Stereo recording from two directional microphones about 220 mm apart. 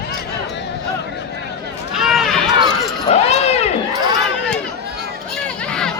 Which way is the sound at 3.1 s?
30° left (ahead or behind).